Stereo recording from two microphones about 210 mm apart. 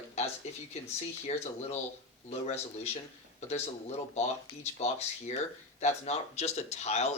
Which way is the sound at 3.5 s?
30° left (ahead or behind).